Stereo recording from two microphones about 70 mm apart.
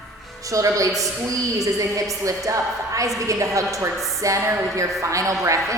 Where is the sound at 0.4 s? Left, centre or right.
Right.